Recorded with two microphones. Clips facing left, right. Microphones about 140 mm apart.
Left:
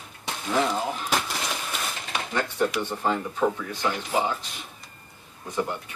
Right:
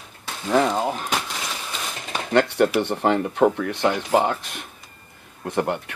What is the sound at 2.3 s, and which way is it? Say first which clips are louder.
Speech: right 8 dB; 70° right (ahead or behind).